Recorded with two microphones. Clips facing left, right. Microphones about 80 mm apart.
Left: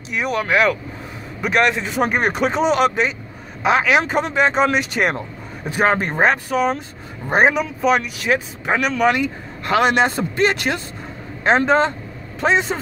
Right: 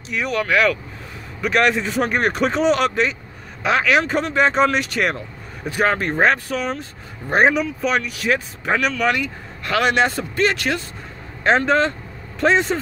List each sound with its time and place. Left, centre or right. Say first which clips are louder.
0.1 s speech: left 1 dB; centre
1.4 s a man's voice: even; centre